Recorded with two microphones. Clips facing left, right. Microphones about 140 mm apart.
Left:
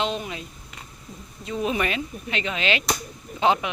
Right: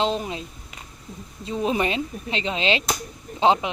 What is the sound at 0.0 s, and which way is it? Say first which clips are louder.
Speech: right 3 dB; 30° right (ahead or behind).